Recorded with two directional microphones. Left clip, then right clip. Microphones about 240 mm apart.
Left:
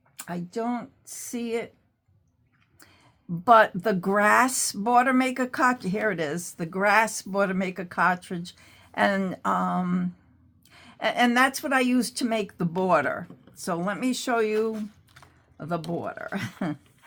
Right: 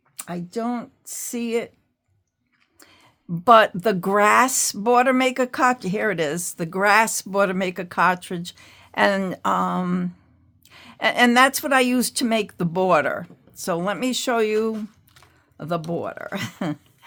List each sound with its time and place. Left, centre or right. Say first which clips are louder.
0.2 s speech: right 3 dB; right
2.8 s speech: right 3 dB; right